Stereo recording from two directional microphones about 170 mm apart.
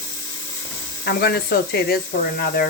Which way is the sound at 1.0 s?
75° left (ahead or behind).